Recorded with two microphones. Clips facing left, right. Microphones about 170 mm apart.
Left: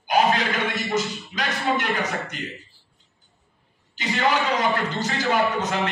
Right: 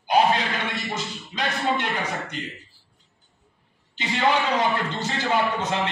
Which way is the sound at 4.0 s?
30° right (ahead or behind).